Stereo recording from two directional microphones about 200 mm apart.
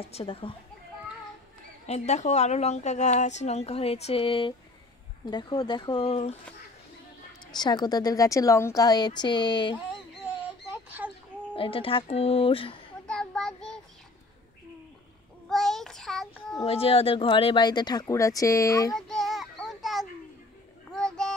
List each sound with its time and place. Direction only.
0.0 s speech: 30° left (ahead or behind)
1.9 s a woman's voice: 35° left (ahead or behind)
7.5 s speech: 20° left (ahead or behind)
10.7 s a sound: 10° right (ahead or behind)
11.5 s speech: 25° left (ahead or behind)
13.0 s child singing: 5° left (ahead or behind)
15.5 s child singing: centre (ahead or behind)
16.6 s speech: 30° left (ahead or behind)
18.9 s child singing: centre (ahead or behind)